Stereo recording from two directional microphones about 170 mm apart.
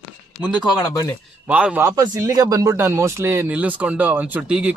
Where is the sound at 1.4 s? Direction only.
5° right (ahead or behind).